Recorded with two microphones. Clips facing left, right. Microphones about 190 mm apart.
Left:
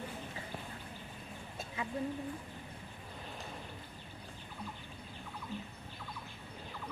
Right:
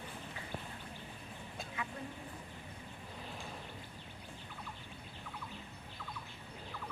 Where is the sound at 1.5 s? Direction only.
25° left (ahead or behind).